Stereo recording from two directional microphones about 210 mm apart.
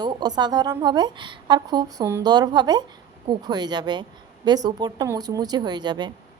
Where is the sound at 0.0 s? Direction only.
20° right (ahead or behind).